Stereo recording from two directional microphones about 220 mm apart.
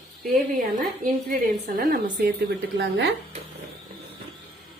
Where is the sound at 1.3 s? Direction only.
40° right (ahead or behind).